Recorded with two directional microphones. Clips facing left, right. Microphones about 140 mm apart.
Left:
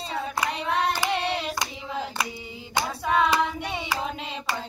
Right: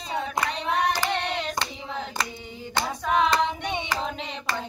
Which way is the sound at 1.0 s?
10° left (ahead or behind).